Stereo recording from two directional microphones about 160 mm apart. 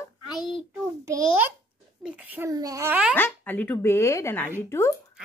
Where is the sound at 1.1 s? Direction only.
20° right (ahead or behind).